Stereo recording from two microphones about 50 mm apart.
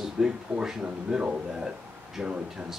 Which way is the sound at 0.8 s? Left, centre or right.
Right.